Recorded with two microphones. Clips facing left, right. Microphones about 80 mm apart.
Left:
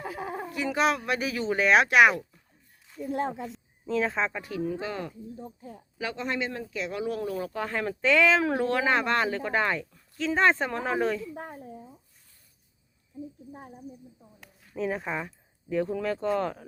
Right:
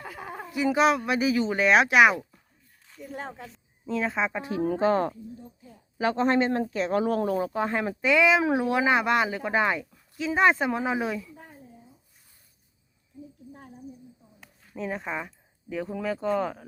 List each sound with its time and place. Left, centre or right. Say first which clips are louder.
0.5 s speech: right 4 dB; centre
3.8 s speech: even; centre
4.3 s speech: right 4 dB; right
4.6 s speech: right 10 dB; right
5.6 s speech: left 7 dB; left
6.0 s speech: right 8 dB; right
7.5 s speech: right 3 dB; right
11.3 s a sound: left 8 dB; left
13.5 s speech: left 2 dB; centre
14.4 s speech: left 3 dB; centre